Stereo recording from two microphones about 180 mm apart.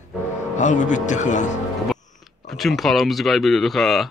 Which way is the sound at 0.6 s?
45° left (ahead or behind).